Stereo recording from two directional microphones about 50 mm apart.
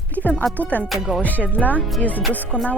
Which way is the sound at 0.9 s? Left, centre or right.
Centre.